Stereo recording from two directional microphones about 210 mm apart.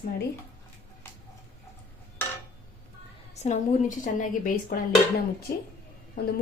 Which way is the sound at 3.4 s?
35° left (ahead or behind).